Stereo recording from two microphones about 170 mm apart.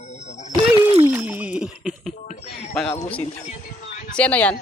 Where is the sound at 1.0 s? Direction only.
10° right (ahead or behind).